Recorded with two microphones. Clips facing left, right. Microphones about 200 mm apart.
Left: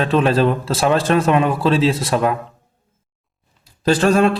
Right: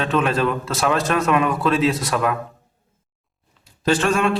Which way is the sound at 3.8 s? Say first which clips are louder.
Left 4 dB; 35° left (ahead or behind).